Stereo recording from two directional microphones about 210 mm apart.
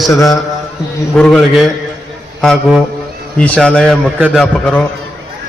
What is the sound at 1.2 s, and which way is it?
A man's voice, 5° left (ahead or behind).